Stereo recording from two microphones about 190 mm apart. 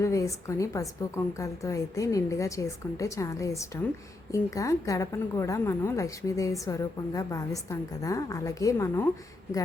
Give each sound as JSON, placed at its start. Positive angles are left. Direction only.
{"t": 0.0, "sound": "a woman's voice", "side_deg": 15}